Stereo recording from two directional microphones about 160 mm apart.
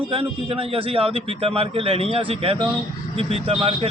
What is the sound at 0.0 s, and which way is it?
Speech, 35° right (ahead or behind).